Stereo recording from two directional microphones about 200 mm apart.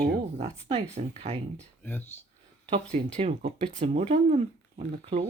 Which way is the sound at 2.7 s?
35° right (ahead or behind).